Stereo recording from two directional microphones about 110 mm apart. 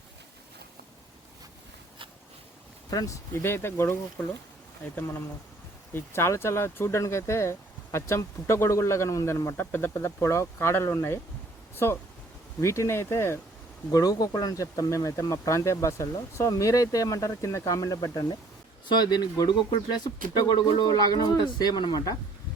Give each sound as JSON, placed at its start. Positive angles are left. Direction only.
{"t": 2.9, "sound": "speech", "side_deg": 30}
{"t": 13.9, "sound": "speech", "side_deg": 35}